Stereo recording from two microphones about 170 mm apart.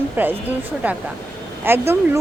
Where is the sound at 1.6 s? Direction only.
15° right (ahead or behind).